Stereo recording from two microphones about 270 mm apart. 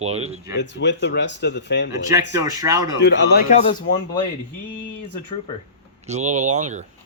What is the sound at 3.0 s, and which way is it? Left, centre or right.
Speech, left.